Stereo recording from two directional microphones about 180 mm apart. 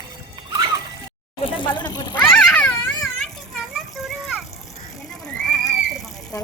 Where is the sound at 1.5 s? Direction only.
25° left (ahead or behind).